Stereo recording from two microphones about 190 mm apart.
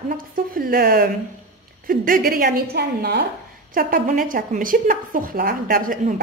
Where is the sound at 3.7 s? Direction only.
45° right (ahead or behind).